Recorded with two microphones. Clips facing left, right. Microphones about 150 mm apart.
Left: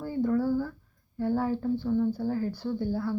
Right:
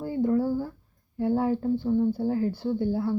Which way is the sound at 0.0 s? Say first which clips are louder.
Right 2 dB; 20° right (ahead or behind).